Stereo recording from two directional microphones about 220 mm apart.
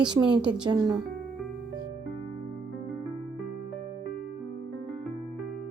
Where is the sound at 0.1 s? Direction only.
20° right (ahead or behind).